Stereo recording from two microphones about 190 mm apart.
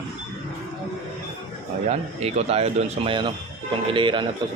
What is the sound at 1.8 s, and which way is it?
A man's voice, 35° right (ahead or behind).